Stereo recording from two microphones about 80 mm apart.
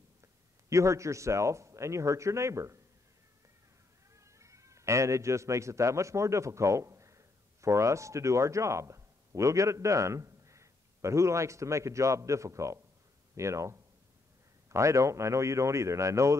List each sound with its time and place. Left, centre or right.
0.7 s a man's voice: right
4.1 s a man's voice: right